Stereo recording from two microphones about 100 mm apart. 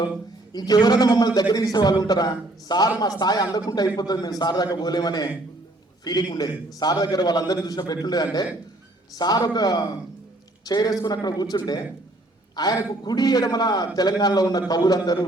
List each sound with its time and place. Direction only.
0.5 s a man's voice: 45° left (ahead or behind)